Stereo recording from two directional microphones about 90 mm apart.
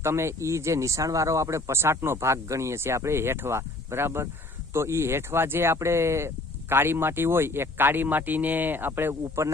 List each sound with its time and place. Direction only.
0.0 s speech: 30° right (ahead or behind)